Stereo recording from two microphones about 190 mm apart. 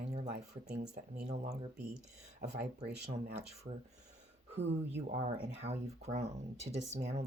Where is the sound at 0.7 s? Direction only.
60° right (ahead or behind).